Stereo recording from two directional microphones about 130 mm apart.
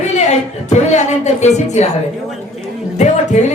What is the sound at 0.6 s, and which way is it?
Speech, 60° left (ahead or behind).